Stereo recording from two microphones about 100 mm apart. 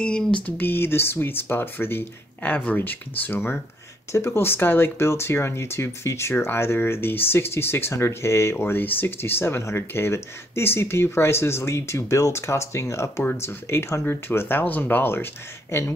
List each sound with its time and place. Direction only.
0.0 s speech: 10° left (ahead or behind)